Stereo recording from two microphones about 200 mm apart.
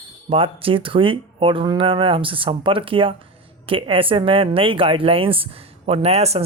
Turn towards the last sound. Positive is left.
turn(degrees=-30)  # may be behind; listen again after turning